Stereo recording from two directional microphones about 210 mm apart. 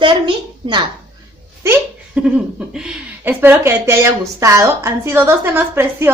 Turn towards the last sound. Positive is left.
turn(degrees=-10)  # may be behind; listen again after turning